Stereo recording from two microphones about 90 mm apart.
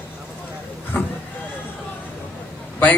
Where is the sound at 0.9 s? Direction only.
20° left (ahead or behind).